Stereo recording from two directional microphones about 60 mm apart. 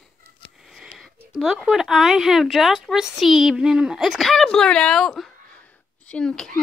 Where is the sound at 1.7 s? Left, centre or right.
Centre.